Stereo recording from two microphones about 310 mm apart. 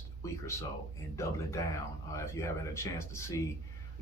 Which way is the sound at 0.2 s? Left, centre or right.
Centre.